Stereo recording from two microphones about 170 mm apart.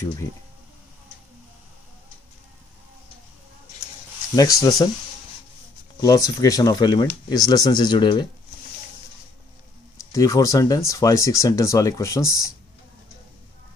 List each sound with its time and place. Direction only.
4.4 s speech: 20° left (ahead or behind)
5.9 s speech: 20° left (ahead or behind)
10.1 s speech: 20° left (ahead or behind)